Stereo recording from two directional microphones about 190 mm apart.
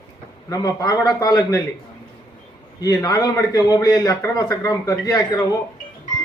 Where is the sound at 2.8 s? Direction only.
15° left (ahead or behind).